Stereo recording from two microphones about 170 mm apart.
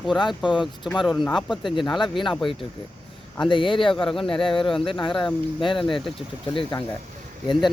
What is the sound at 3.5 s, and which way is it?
Speech, 30° left (ahead or behind).